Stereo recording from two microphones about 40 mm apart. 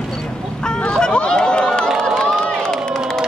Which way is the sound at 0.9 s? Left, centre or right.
Left.